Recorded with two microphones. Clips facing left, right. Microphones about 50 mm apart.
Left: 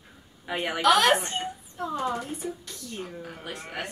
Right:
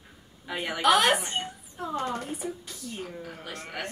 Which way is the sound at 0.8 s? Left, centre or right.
Centre.